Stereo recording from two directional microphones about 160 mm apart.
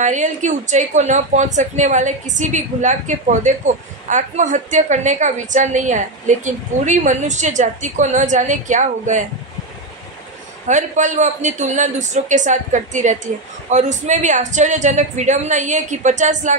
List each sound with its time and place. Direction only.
0.0 s speech: 50° right (ahead or behind)
10.7 s speech: 50° right (ahead or behind)